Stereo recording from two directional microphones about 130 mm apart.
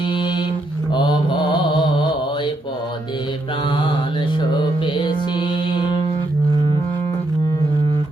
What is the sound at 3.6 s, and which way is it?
Music, 40° left (ahead or behind).